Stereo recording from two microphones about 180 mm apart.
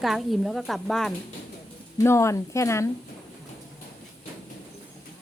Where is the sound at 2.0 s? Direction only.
15° left (ahead or behind).